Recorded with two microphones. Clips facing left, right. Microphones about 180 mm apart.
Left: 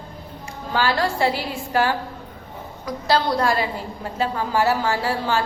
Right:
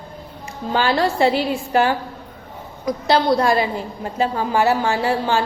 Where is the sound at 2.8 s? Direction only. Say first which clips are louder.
Right 3 dB; 20° right (ahead or behind).